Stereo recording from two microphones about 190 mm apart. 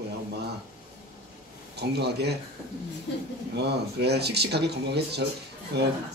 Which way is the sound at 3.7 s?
60° right (ahead or behind).